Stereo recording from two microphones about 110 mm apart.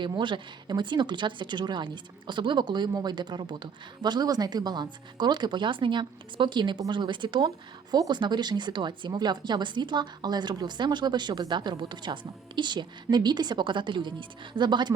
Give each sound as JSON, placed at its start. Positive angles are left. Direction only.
{"t": 0.0, "sound": "speech", "side_deg": -45}